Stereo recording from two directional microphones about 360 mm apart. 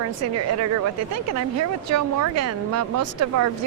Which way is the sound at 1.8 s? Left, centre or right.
Right.